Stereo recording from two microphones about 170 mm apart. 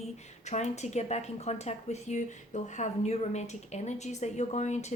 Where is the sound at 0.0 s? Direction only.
40° left (ahead or behind).